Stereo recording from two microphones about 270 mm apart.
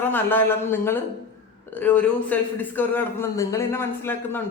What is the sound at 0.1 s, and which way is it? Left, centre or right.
Speech, centre.